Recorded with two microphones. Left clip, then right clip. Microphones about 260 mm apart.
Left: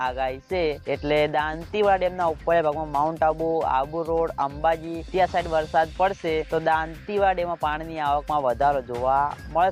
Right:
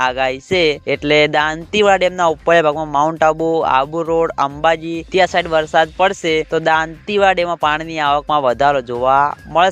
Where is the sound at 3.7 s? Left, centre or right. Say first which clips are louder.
Right 9 dB; right.